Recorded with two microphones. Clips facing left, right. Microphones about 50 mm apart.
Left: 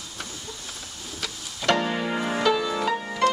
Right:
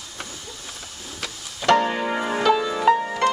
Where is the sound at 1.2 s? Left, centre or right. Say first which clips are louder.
Right 3 dB; centre.